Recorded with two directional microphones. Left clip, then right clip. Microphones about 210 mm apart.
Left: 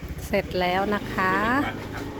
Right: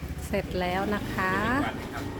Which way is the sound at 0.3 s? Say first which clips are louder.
Left 5 dB; 15° left (ahead or behind).